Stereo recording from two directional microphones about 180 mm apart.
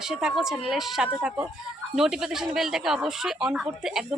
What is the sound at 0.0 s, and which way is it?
Speech, 5° right (ahead or behind).